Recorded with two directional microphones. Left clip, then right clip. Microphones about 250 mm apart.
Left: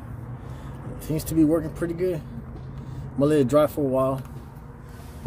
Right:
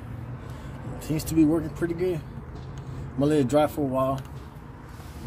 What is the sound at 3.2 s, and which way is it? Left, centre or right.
Speech, left.